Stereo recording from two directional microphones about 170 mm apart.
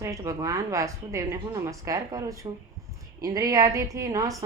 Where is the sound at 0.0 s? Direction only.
20° right (ahead or behind).